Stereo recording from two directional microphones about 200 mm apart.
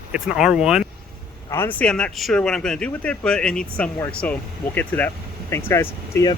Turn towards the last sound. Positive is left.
turn(degrees=15)  # may be behind; listen again after turning